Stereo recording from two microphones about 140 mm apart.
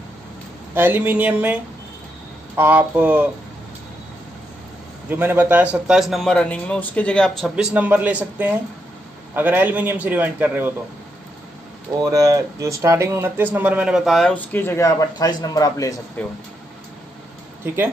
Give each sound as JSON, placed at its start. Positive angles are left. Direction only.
{"t": 0.7, "sound": "speech", "side_deg": -15}
{"t": 5.1, "sound": "a man's voice", "side_deg": -15}
{"t": 12.0, "sound": "a man's voice", "side_deg": -25}